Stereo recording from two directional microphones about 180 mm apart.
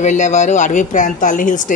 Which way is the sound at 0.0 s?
40° left (ahead or behind).